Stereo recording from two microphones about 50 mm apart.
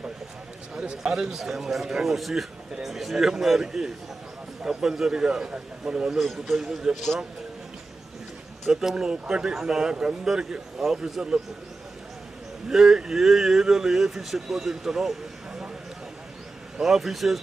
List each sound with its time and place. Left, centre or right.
0.8 s a man's voice: centre
6.1 s a man's voice: centre
6.9 s speech: centre
8.6 s speech: centre
12.6 s speech: centre
16.8 s a man's voice: centre